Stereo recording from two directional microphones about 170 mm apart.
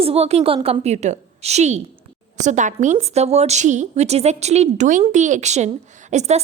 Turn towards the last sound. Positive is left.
turn(degrees=-40)  # may be behind; listen again after turning